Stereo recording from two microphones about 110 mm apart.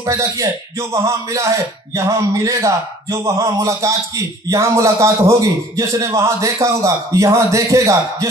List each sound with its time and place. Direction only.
0.0 s a man's voice: 30° right (ahead or behind)